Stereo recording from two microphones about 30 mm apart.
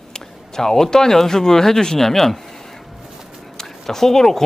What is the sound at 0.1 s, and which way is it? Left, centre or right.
Speech, centre.